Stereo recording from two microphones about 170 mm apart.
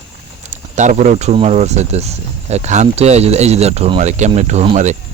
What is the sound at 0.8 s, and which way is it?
Speech, 45° right (ahead or behind).